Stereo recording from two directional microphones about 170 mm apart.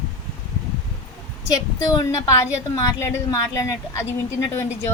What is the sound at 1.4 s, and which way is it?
A woman's voice, 20° left (ahead or behind).